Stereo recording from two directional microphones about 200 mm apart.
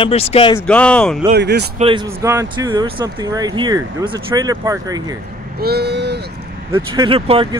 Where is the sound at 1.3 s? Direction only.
55° right (ahead or behind).